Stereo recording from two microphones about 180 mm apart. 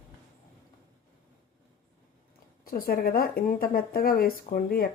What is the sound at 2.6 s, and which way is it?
Speech, 55° left (ahead or behind).